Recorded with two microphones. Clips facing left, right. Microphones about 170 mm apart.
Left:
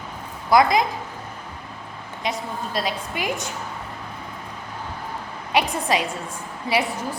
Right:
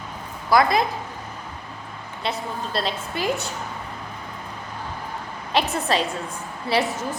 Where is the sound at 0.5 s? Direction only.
15° left (ahead or behind).